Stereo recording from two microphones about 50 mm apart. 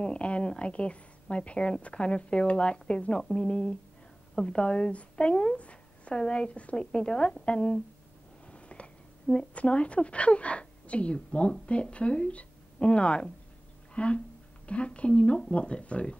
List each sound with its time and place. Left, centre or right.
0.0 s a woman's voice: left